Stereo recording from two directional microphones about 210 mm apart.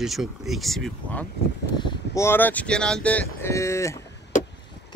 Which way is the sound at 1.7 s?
15° left (ahead or behind).